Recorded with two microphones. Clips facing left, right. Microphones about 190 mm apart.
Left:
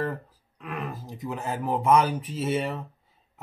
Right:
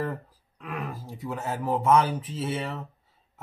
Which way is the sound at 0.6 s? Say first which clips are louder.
Left 1 dB; centre (ahead or behind).